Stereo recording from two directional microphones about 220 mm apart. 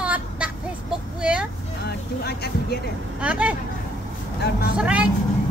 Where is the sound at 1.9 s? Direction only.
45° left (ahead or behind).